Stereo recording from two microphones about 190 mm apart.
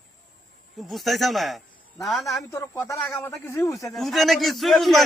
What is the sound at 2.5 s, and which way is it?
Speech, 15° left (ahead or behind).